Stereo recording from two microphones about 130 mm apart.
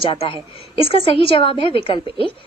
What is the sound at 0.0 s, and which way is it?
A woman's voice, 45° left (ahead or behind).